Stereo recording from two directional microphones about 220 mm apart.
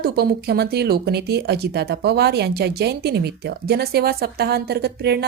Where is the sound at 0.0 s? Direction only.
45° right (ahead or behind).